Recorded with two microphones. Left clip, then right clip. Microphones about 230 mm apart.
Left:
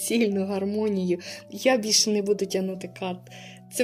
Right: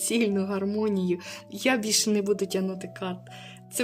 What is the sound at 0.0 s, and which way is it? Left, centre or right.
Speech, centre.